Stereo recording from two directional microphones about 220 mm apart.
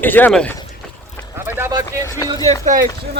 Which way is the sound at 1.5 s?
10° right (ahead or behind).